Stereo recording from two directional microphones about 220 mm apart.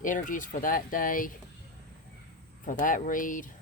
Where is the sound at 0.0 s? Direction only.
35° left (ahead or behind).